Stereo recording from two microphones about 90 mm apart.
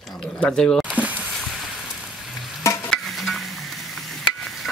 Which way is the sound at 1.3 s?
Centre (ahead or behind).